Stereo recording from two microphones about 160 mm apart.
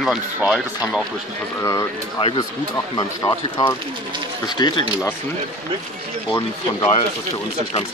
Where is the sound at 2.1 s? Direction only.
30° left (ahead or behind).